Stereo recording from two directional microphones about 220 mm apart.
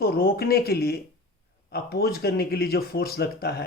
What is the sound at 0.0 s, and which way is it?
Speech, 45° left (ahead or behind).